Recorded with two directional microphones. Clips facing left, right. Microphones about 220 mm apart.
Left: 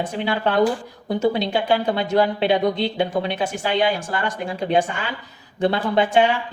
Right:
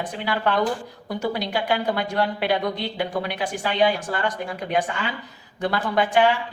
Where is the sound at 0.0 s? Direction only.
25° left (ahead or behind).